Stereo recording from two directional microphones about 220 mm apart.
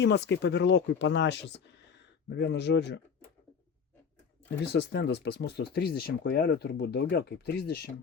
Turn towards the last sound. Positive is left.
turn(degrees=45)  # may be behind; listen again after turning